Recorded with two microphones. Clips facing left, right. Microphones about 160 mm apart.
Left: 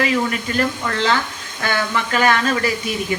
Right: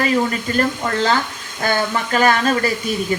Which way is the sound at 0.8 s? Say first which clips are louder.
Right 1 dB; 40° right (ahead or behind).